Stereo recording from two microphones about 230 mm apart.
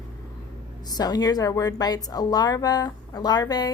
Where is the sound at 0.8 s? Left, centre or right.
Centre.